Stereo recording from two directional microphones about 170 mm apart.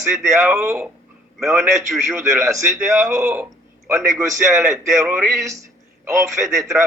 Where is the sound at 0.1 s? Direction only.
Centre (ahead or behind).